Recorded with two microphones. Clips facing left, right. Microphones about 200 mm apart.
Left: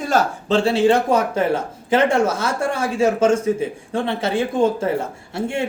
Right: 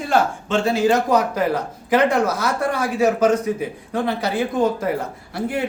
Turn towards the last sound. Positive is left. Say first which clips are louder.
# even
turn(degrees=25)  # may be behind; listen again after turning